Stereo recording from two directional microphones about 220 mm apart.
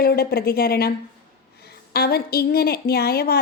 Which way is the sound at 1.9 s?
45° left (ahead or behind).